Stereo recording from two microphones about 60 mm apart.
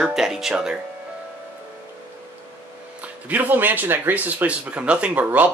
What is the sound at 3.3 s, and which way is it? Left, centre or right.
Speech, right.